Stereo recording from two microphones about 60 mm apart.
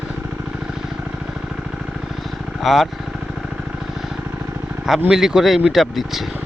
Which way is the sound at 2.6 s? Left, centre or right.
Centre.